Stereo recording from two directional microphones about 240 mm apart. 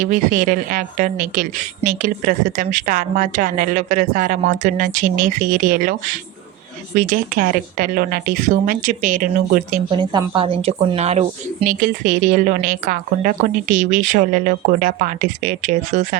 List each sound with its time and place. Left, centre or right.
0.0 s a woman's voice: right
9.9 s a woman's voice: centre